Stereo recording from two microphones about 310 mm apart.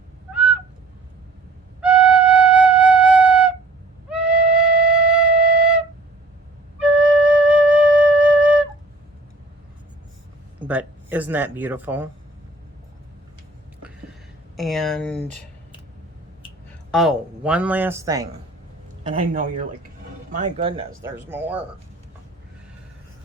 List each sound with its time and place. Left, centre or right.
0.3 s goose: centre
1.8 s flute: centre
4.1 s music: centre
5.3 s flute: centre
10.6 s a sound: centre
14.5 s speech: centre
16.6 s speech: centre